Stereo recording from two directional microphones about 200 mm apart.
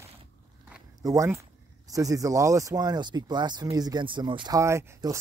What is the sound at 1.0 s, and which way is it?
Speech, 15° right (ahead or behind).